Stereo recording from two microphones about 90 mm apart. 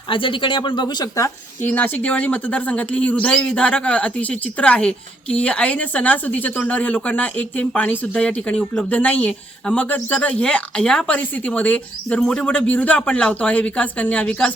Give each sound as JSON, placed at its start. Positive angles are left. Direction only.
{"t": 0.1, "sound": "speech", "side_deg": 70}
{"t": 1.6, "sound": "speech", "side_deg": 20}